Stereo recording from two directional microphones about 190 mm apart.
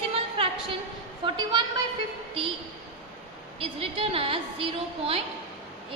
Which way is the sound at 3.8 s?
30° right (ahead or behind).